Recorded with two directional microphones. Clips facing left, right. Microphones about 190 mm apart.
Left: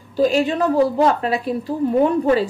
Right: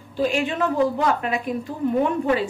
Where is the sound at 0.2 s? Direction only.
35° left (ahead or behind).